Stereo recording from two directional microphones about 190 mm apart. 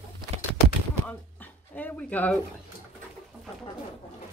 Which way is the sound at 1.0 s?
10° left (ahead or behind).